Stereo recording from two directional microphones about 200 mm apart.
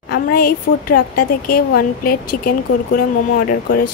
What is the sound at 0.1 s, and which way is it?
Speech, 45° left (ahead or behind).